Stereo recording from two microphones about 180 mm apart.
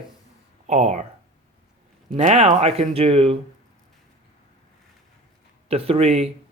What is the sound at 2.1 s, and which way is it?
Speech, 35° right (ahead or behind).